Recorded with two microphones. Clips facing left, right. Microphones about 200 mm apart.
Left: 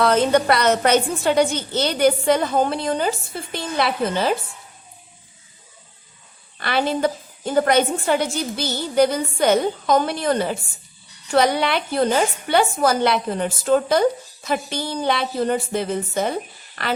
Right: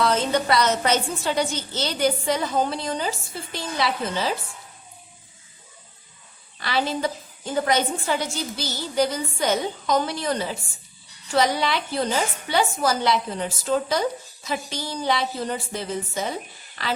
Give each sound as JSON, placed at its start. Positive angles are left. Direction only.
{"t": 0.0, "sound": "a woman's voice", "side_deg": 55}
{"t": 6.6, "sound": "a woman's voice", "side_deg": 60}